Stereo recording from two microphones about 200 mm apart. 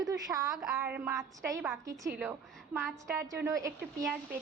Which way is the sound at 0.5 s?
5° right (ahead or behind).